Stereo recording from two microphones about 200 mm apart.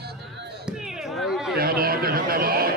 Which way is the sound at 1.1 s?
Centre (ahead or behind).